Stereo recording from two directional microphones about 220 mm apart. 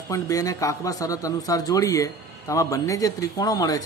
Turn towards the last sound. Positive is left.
turn(degrees=15)  # may be behind; listen again after turning